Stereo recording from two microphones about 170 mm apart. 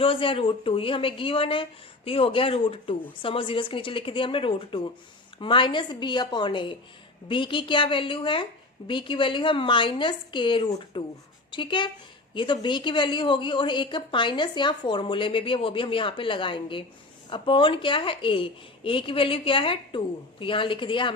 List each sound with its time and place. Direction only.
0.0 s a woman's voice: 30° left (ahead or behind)